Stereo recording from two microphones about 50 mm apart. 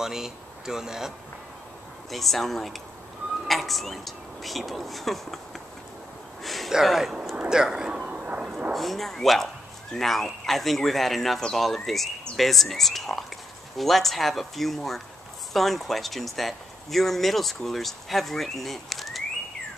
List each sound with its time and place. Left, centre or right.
0.0 s speech: centre
2.0 s speech: centre
6.4 s gasp: centre
6.7 s speech: centre
7.4 s a sound: centre
8.7 s speech: centre